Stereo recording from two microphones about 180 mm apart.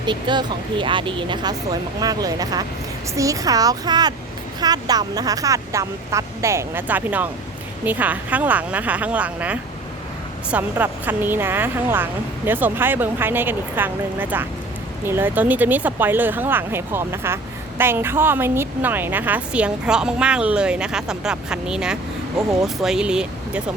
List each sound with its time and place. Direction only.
0.0 s speech: 25° right (ahead or behind); by 23.6 s 5° right (ahead or behind)